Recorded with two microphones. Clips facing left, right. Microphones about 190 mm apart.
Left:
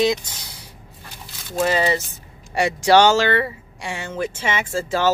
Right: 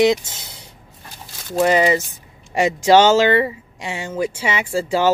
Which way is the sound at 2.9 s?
15° right (ahead or behind).